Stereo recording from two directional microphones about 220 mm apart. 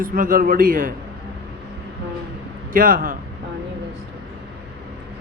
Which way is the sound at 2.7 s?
40° right (ahead or behind).